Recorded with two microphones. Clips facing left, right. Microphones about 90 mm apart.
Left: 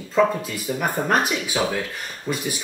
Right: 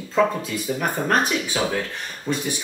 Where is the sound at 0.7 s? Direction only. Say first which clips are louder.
Left 1 dB; 5° left (ahead or behind).